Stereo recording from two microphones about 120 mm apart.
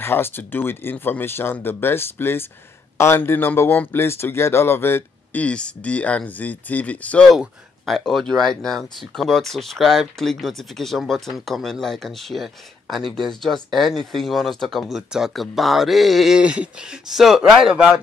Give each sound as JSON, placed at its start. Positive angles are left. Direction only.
{"t": 0.0, "sound": "speech", "side_deg": 20}
{"t": 7.2, "sound": "speech", "side_deg": 0}